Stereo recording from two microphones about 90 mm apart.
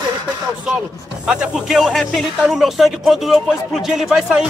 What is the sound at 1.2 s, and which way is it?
Speech, 10° right (ahead or behind).